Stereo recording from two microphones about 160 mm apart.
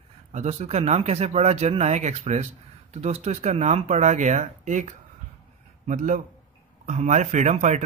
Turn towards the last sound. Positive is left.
turn(degrees=-45)  # may be behind; listen again after turning